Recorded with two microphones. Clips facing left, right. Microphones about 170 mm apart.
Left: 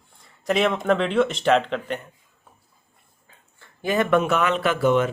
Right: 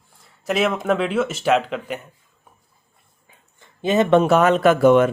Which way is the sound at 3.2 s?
20° right (ahead or behind).